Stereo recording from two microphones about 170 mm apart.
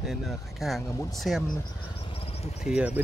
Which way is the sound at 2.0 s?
35° left (ahead or behind).